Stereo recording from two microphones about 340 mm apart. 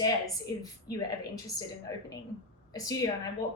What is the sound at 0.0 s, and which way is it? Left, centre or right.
Speech, centre.